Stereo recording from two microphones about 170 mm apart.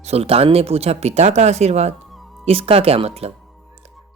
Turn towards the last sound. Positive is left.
turn(degrees=-35)  # may be behind; listen again after turning